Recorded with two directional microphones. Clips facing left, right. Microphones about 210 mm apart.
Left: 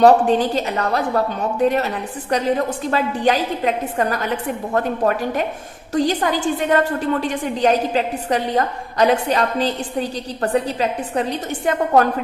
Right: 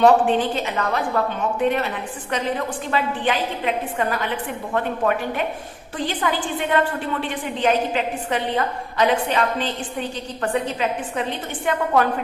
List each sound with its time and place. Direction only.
0.0 s a woman's voice: 40° left (ahead or behind)